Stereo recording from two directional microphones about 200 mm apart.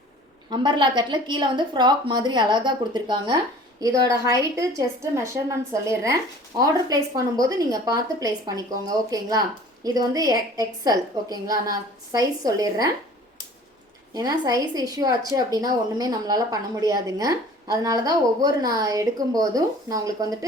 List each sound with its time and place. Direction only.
0.5 s a woman's voice: 20° right (ahead or behind)
14.1 s a woman's voice: 20° right (ahead or behind)